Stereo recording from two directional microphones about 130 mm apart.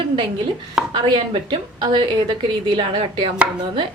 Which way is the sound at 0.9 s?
35° right (ahead or behind).